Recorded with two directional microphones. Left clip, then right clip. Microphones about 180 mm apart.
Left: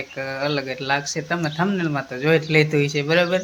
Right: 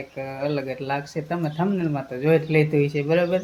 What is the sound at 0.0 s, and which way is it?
Speech, centre (ahead or behind).